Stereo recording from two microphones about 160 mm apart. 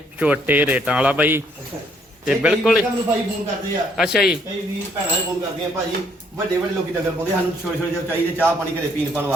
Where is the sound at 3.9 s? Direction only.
5° right (ahead or behind).